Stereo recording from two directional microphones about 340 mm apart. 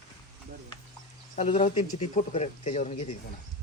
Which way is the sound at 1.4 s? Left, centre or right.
Centre.